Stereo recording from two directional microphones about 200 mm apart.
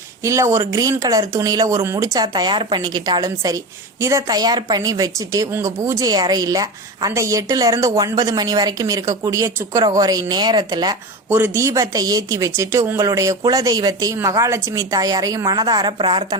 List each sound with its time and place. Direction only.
0.2 s a woman's voice: 15° right (ahead or behind)